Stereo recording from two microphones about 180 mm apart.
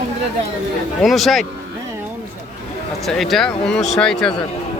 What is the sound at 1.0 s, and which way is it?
Speech, centre (ahead or behind).